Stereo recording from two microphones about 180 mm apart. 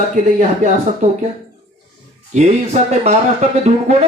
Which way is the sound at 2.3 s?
40° right (ahead or behind).